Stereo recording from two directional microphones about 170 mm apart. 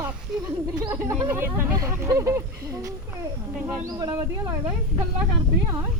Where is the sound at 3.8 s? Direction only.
20° right (ahead or behind).